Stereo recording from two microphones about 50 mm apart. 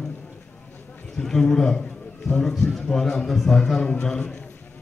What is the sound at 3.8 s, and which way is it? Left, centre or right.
Speech, left.